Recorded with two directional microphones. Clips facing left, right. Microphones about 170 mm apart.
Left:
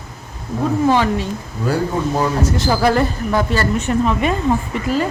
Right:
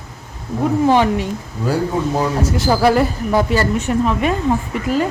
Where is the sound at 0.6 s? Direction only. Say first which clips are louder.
Right 2 dB; 15° right (ahead or behind).